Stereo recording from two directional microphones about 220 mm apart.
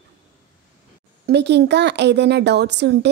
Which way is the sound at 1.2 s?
50° right (ahead or behind).